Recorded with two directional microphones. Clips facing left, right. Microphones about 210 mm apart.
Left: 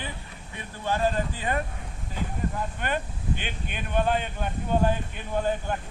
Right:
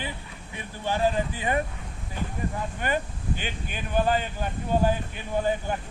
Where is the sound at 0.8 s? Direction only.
15° right (ahead or behind).